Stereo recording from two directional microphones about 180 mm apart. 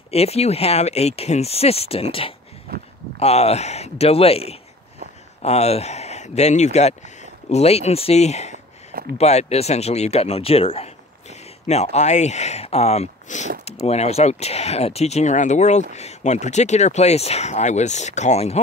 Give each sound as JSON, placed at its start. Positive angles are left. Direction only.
{"t": 0.1, "sound": "speech", "side_deg": 35}
{"t": 2.7, "sound": "a sound", "side_deg": -55}
{"t": 3.2, "sound": "speech", "side_deg": 35}